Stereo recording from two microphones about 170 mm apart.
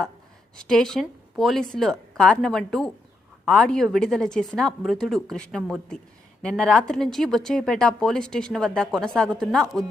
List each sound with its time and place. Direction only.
0.5 s speech: 5° left (ahead or behind)